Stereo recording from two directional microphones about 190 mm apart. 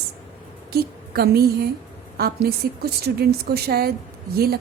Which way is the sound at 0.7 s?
55° right (ahead or behind).